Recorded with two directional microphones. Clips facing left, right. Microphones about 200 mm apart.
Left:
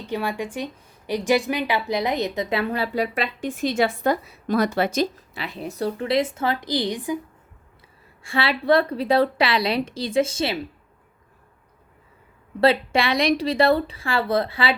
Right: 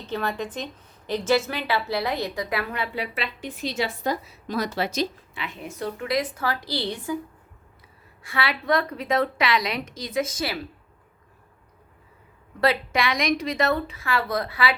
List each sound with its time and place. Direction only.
0.1 s a woman's voice: 10° left (ahead or behind)
8.2 s a woman's voice: 30° left (ahead or behind)
12.5 s a woman's voice: 30° left (ahead or behind)